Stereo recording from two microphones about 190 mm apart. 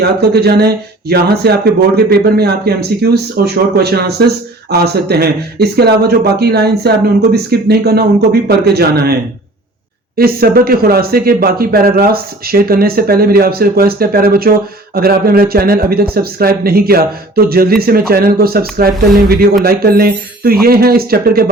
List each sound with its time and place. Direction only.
0.0 s speech: 60° right (ahead or behind)
10.2 s speech: 50° right (ahead or behind)